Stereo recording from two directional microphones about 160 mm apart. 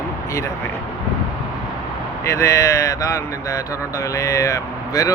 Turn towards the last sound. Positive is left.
turn(degrees=20)  # may be behind; listen again after turning